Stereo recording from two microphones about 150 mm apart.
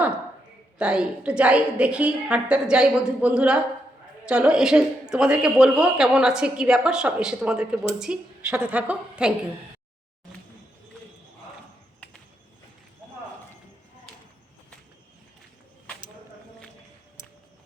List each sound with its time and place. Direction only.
0.8 s a woman's voice: 5° right (ahead or behind)